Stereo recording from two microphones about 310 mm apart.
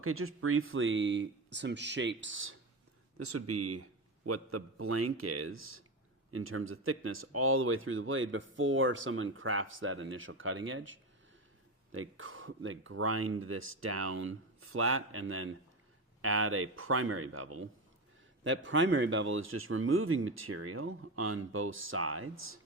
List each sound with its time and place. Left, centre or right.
0.0 s a man's voice: right